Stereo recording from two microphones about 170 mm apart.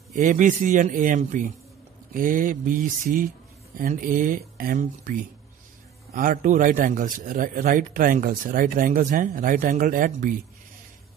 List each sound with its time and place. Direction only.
0.1 s a man's voice: 50° right (ahead or behind)